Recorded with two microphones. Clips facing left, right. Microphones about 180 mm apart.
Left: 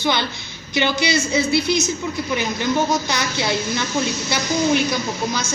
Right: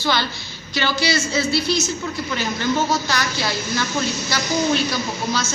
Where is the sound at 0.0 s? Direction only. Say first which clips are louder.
Left 1 dB; 20° left (ahead or behind).